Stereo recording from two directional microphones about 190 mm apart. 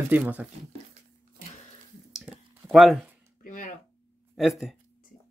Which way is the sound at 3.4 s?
45° left (ahead or behind).